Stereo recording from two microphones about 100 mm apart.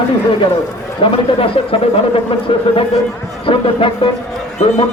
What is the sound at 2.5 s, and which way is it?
A man's voice, 65° left (ahead or behind).